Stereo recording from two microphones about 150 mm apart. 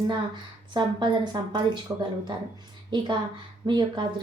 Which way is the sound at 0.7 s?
30° right (ahead or behind).